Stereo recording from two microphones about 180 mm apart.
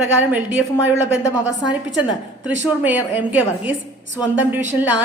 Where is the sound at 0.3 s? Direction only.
10° right (ahead or behind).